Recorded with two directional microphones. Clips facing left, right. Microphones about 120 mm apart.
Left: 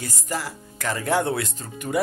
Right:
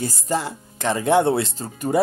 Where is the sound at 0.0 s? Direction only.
25° right (ahead or behind).